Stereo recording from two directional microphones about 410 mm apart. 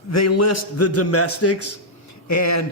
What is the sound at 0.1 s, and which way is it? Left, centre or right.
A man's voice, left.